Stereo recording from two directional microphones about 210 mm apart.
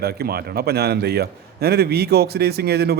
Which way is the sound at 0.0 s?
45° right (ahead or behind).